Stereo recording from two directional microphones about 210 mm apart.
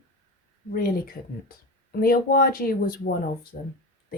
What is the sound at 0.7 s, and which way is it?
Speech, 40° left (ahead or behind).